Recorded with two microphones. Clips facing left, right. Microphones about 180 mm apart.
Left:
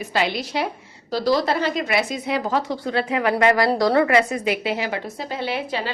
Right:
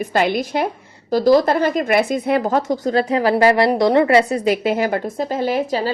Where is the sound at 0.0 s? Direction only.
50° right (ahead or behind).